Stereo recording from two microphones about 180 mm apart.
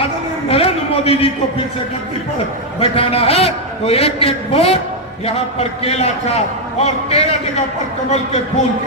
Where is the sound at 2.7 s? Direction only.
30° left (ahead or behind).